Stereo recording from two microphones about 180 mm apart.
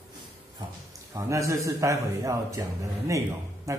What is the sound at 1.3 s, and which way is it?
A man's voice, 15° right (ahead or behind).